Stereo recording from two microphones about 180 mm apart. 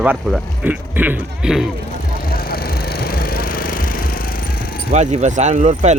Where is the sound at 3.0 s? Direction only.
55° left (ahead or behind).